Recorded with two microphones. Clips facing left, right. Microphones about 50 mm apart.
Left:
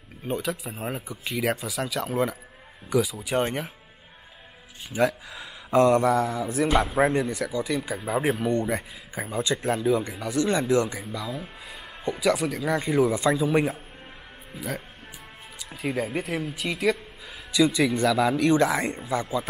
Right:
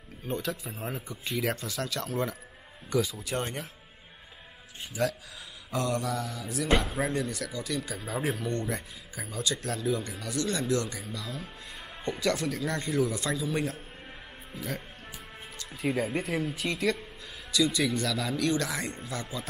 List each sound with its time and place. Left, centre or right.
0.4 s speech: centre
4.9 s speech: left
11.7 s speech: centre; by 13.7 s left
14.5 s speech: centre
17.5 s speech: centre